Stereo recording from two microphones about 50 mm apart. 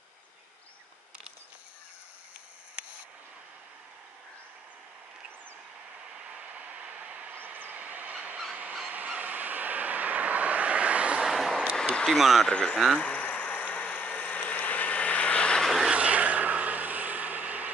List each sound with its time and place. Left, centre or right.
6.1 s vehicle: right
7.3 s train: right
8.8 s vehicle: right
11.2 s a sound: centre
11.7 s a sound: centre
12.1 s speech: centre
12.4 s speech: centre
13.0 s vehicle: left
13.3 s vehicle: left
13.7 s a sound: left
13.9 s vehicle: left
15.9 s vehicle: right